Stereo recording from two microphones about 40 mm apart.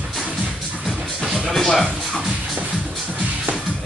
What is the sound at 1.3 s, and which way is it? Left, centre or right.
Music, centre.